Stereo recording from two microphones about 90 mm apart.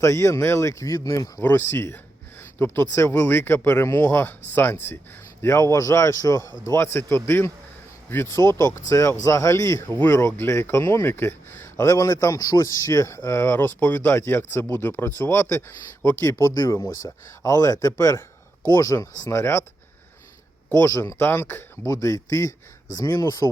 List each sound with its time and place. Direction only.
0.0 s speech: 35° left (ahead or behind)
1.4 s speech: 25° left (ahead or behind)
2.4 s a sound: 25° left (ahead or behind)
2.9 s speech: 30° left (ahead or behind)
13.7 s speech: 20° left (ahead or behind)
20.8 s speech: 30° left (ahead or behind)
21.8 s speech: 40° left (ahead or behind)